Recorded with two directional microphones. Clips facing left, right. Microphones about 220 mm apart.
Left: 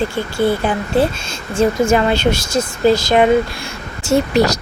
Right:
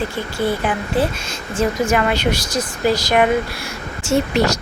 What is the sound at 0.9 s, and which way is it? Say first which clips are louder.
Speech: left 4 dB; 25° left (ahead or behind).